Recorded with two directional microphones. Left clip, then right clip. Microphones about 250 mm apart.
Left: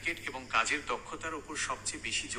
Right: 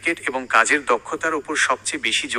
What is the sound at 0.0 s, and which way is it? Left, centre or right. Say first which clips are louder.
A man's voice: right 13 dB; right.